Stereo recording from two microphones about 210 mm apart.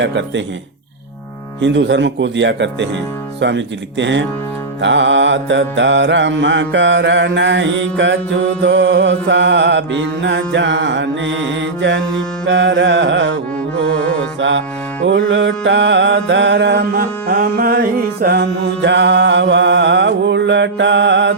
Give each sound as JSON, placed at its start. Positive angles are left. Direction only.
{"t": 0.0, "sound": "music", "side_deg": -60}
{"t": 1.6, "sound": "music", "side_deg": -60}
{"t": 15.3, "sound": "music", "side_deg": -60}